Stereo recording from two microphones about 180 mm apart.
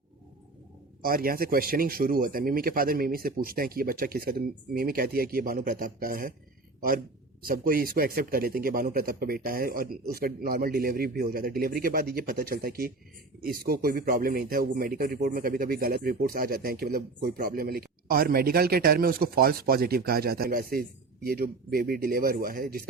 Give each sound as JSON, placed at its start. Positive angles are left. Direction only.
{"t": 1.0, "sound": "speech", "side_deg": -55}
{"t": 7.4, "sound": "speech", "side_deg": -55}